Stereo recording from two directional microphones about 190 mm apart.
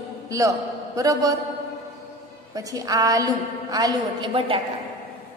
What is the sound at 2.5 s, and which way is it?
A woman's voice, 20° right (ahead or behind).